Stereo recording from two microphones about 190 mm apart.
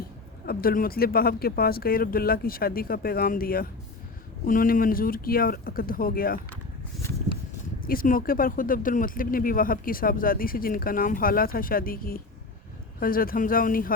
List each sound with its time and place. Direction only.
0.4 s speech: 50° left (ahead or behind)
7.8 s speech: 50° left (ahead or behind)